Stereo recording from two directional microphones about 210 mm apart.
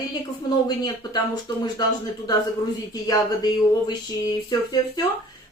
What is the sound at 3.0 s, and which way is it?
Speech, 20° left (ahead or behind).